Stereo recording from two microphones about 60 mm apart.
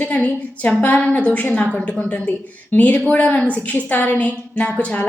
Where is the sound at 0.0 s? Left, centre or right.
Left.